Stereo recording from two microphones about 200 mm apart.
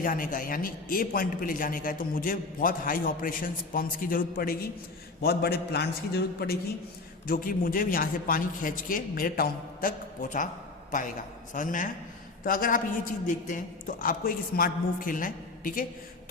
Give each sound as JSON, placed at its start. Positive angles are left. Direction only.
{"t": 0.0, "sound": "a man's voice", "side_deg": 45}
{"t": 11.5, "sound": "a man's voice", "side_deg": 40}